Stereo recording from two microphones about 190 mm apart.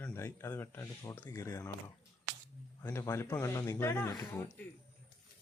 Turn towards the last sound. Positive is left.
turn(degrees=10)  # may be behind; listen again after turning